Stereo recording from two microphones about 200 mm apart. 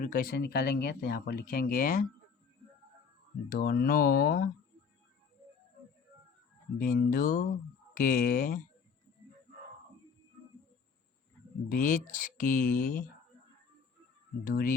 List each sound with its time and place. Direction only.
0.0 s speech: 45° left (ahead or behind)
3.5 s speech: 45° left (ahead or behind)
6.7 s speech: 45° left (ahead or behind)
11.7 s speech: 40° left (ahead or behind)
14.4 s speech: 45° left (ahead or behind)